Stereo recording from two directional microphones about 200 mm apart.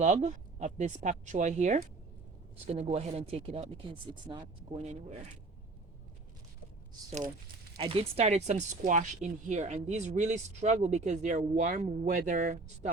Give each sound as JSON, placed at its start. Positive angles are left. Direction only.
{"t": 0.0, "sound": "speech", "side_deg": -35}
{"t": 2.9, "sound": "speech", "side_deg": -30}
{"t": 7.1, "sound": "speech", "side_deg": -35}